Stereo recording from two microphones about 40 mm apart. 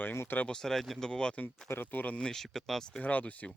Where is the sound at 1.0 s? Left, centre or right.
Left.